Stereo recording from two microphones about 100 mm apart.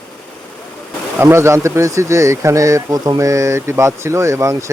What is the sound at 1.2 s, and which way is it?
Speech, 25° right (ahead or behind).